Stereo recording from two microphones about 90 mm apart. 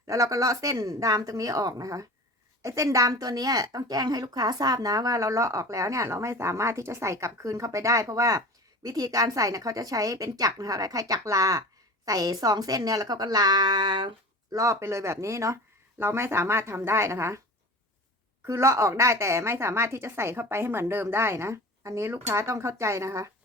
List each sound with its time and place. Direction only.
0.1 s a woman's voice: 40° right (ahead or behind)
14.5 s a woman's voice: 35° right (ahead or behind)
18.4 s a woman's voice: 35° right (ahead or behind)